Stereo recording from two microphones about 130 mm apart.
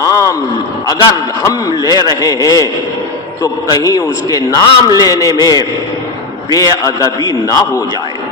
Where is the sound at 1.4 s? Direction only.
25° left (ahead or behind).